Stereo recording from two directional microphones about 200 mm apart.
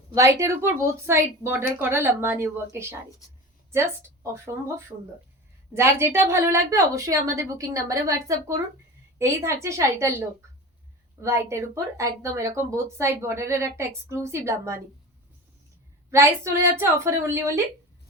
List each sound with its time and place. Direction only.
0.1 s a woman's voice: 15° right (ahead or behind)
5.7 s speech: 15° right (ahead or behind)
16.1 s speech: 10° right (ahead or behind)